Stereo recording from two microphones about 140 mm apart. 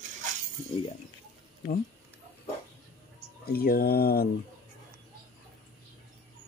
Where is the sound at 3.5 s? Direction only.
90° left.